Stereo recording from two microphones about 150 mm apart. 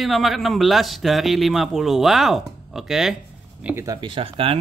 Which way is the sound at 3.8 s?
30° right (ahead or behind).